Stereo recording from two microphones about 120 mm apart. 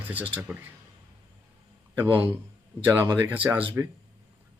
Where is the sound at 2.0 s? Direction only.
15° right (ahead or behind).